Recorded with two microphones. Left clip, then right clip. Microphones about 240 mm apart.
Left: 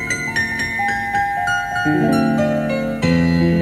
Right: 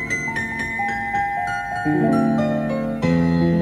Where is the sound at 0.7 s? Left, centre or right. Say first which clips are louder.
Left 3 dB; left.